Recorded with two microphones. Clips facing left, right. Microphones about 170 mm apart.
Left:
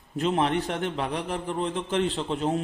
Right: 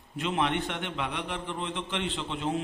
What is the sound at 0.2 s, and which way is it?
A man's voice, 40° left (ahead or behind).